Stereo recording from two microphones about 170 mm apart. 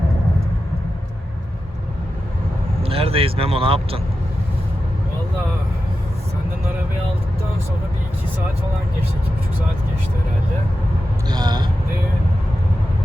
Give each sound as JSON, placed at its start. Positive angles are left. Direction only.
{"t": 2.8, "sound": "speech", "side_deg": -35}
{"t": 11.3, "sound": "speech", "side_deg": -25}